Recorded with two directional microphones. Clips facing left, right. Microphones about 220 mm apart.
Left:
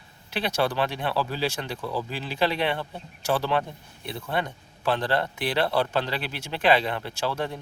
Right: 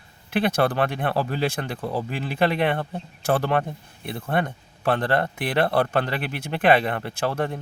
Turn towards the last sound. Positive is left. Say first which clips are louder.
# right 3 dB
turn(degrees=-55)  # may be behind; listen again after turning